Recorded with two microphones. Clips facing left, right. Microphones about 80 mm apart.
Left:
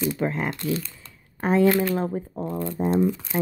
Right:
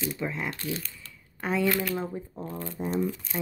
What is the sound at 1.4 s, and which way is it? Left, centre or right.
Speech, left.